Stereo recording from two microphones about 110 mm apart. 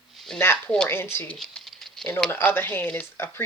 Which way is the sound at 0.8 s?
20° left (ahead or behind).